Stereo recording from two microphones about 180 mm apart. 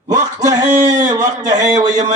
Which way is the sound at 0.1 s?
20° right (ahead or behind).